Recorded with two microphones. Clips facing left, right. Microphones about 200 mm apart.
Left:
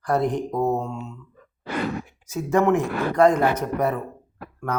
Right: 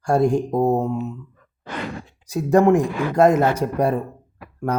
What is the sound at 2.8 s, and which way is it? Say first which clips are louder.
Speech: right 2 dB; 25° right (ahead or behind).